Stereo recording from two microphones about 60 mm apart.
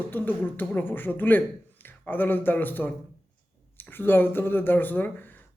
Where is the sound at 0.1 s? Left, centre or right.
Left.